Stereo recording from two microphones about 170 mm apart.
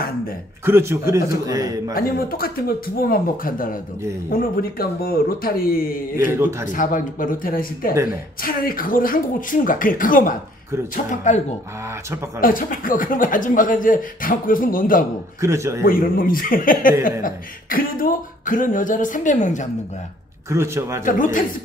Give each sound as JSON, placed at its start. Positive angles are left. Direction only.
{"t": 0.7, "sound": "a man's voice", "side_deg": -15}
{"t": 2.0, "sound": "speech", "side_deg": 60}
{"t": 12.4, "sound": "speech", "side_deg": 55}
{"t": 15.4, "sound": "speech", "side_deg": -15}
{"t": 15.8, "sound": "speech", "side_deg": 55}
{"t": 20.4, "sound": "speech", "side_deg": -15}
{"t": 21.0, "sound": "speech", "side_deg": 50}